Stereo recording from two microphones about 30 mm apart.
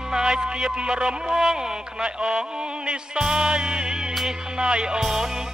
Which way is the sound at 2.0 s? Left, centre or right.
Right.